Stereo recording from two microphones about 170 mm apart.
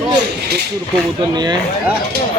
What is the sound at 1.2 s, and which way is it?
Speech, 25° right (ahead or behind).